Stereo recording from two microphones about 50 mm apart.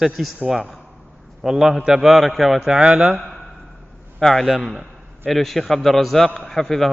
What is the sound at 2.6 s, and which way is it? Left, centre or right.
Speech, centre.